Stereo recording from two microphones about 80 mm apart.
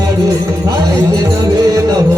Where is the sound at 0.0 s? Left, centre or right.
Right.